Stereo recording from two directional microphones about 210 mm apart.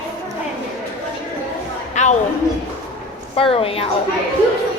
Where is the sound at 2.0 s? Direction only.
35° left (ahead or behind).